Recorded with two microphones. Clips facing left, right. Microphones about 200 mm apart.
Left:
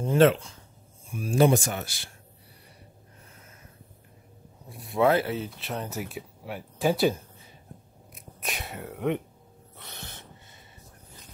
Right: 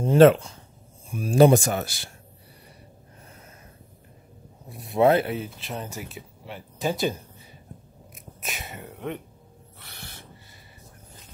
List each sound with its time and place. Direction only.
0.0 s speech: 40° right (ahead or behind)
4.7 s speech: 25° right (ahead or behind)
5.6 s speech: centre (ahead or behind)
8.4 s speech: centre (ahead or behind)
9.8 s wheeze: 20° left (ahead or behind)